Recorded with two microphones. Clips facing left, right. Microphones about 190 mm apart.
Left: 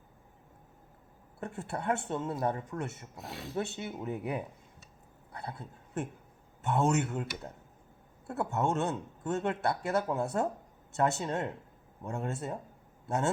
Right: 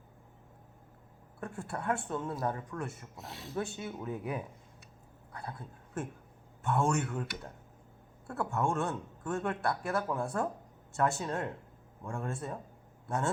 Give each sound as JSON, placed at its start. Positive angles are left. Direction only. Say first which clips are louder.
{"t": 1.4, "sound": "speech", "louder": "left 2 dB", "side_deg": 20}
{"t": 5.5, "sound": "a woman's voice", "louder": "left 2 dB", "side_deg": 20}